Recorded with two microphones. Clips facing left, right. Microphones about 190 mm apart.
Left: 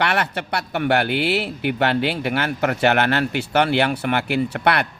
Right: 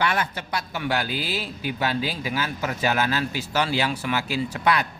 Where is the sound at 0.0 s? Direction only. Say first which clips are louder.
Left 3 dB; 70° left (ahead or behind).